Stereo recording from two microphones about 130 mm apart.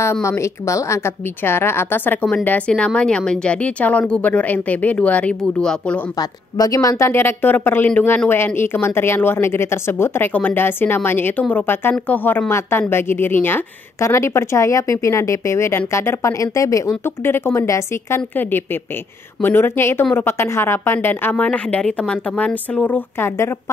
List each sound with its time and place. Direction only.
0.0 s a woman's voice: 20° left (ahead or behind)
6.1 s speech: 25° left (ahead or behind)